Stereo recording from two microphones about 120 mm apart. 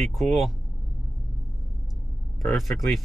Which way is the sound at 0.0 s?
Centre (ahead or behind).